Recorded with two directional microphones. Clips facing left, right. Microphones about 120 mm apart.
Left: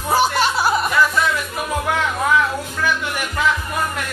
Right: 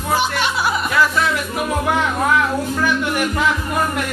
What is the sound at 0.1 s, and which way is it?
Music, 35° left (ahead or behind).